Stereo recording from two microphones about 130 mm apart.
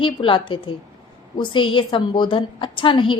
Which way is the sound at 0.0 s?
40° left (ahead or behind).